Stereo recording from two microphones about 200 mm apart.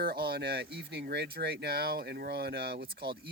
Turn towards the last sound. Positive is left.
turn(degrees=-55)  # may be behind; listen again after turning